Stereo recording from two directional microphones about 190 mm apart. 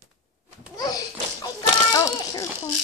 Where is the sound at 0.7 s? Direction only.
20° left (ahead or behind).